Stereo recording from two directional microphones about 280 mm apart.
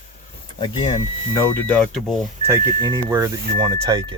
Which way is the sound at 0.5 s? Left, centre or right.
Centre.